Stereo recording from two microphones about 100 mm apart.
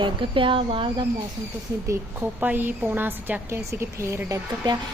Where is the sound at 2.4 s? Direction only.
20° right (ahead or behind).